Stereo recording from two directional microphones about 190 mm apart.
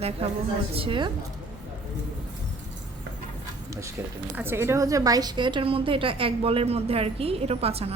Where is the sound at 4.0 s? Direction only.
10° right (ahead or behind).